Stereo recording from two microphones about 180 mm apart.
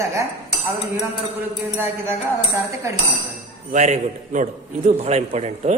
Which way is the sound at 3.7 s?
45° right (ahead or behind).